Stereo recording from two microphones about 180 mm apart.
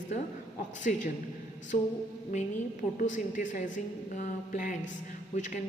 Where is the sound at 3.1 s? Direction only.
45° left (ahead or behind).